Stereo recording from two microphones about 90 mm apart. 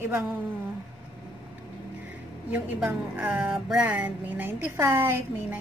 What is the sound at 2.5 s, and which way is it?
A woman's voice, 15° right (ahead or behind).